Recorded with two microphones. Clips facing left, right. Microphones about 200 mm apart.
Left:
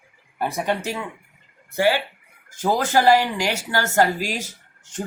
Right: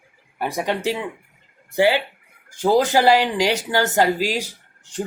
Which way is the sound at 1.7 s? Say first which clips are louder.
Right 2 dB; 15° right (ahead or behind).